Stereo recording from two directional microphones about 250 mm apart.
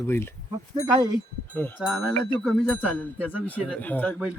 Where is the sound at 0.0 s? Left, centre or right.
Centre.